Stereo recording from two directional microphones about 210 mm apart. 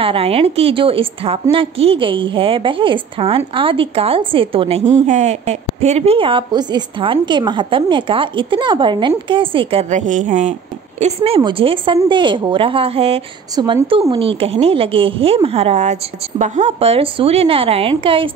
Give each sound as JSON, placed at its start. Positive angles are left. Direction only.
{"t": 0.0, "sound": "a woman's voice", "side_deg": -25}